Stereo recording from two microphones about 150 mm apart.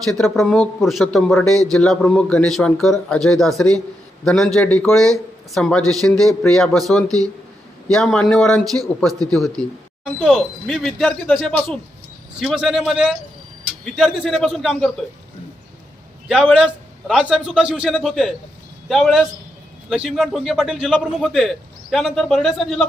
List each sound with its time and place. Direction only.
0.0 s a man's voice: centre (ahead or behind)
16.3 s a man's voice: 5° right (ahead or behind)